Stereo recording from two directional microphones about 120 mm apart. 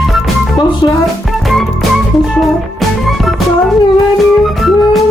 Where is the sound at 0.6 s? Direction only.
40° left (ahead or behind).